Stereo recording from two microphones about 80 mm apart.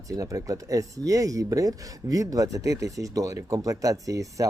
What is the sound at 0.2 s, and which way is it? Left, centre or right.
Speech, right.